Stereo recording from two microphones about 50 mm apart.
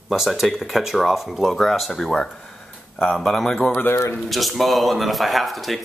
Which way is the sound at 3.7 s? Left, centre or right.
Left.